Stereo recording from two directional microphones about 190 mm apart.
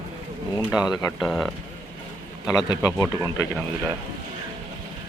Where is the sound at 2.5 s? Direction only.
20° left (ahead or behind).